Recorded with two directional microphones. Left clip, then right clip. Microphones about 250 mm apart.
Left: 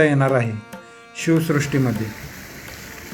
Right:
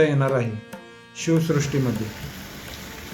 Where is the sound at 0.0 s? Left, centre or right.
Centre.